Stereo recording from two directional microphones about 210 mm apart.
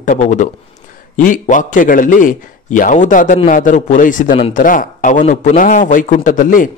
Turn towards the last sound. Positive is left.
turn(degrees=40)  # may be behind; listen again after turning